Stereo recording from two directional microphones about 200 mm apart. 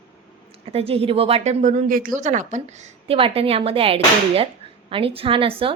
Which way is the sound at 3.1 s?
25° right (ahead or behind).